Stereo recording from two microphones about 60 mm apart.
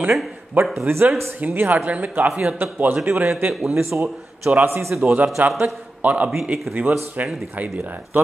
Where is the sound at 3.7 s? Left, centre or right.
Right.